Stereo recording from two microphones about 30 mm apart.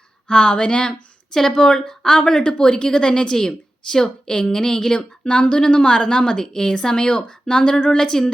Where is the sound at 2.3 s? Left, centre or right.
Left.